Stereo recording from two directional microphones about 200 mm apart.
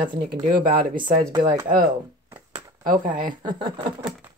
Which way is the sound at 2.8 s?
45° right (ahead or behind).